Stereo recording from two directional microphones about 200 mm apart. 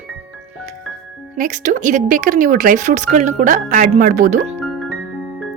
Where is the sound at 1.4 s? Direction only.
40° right (ahead or behind).